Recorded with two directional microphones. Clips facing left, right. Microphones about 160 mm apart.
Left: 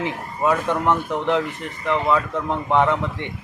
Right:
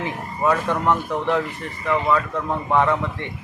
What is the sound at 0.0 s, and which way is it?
Speech, 20° left (ahead or behind).